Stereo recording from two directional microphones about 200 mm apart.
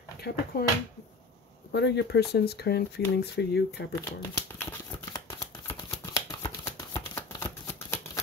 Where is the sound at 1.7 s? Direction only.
60° left (ahead or behind).